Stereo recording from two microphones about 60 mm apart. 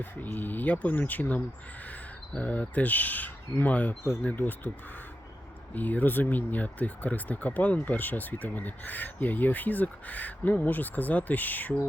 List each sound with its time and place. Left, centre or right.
0.3 s speech: left
5.7 s speech: left